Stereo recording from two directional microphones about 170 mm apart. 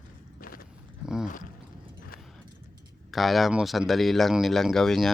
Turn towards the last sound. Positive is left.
turn(degrees=0)  # may be behind; listen again after turning